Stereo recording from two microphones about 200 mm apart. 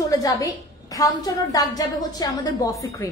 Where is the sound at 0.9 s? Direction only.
20° left (ahead or behind).